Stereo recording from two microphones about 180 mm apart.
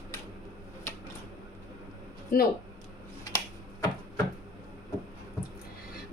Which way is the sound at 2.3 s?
55° left (ahead or behind).